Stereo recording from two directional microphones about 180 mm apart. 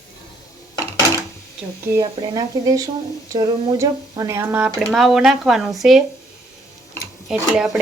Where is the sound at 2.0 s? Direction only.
20° right (ahead or behind); by 6.1 s centre (ahead or behind).